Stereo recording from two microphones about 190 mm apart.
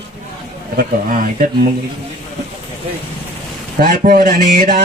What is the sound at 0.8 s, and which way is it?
Mantra, 45° right (ahead or behind).